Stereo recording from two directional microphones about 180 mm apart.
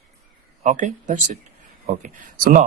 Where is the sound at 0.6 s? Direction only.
40° right (ahead or behind).